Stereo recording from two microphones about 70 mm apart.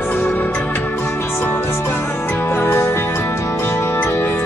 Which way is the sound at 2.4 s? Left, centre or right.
Left.